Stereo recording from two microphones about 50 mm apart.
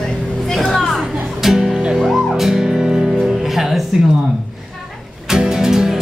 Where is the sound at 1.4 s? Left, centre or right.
Centre.